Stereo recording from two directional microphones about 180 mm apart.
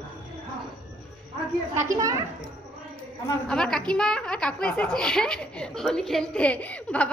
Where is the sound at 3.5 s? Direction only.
5° left (ahead or behind).